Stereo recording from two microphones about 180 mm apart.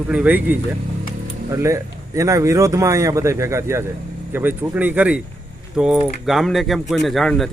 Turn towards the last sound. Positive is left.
turn(degrees=0)  # may be behind; listen again after turning